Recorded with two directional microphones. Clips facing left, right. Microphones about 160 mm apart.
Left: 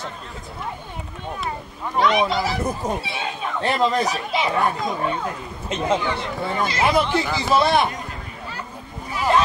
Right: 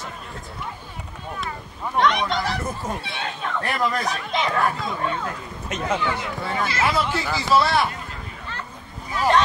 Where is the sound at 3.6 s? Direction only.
25° left (ahead or behind).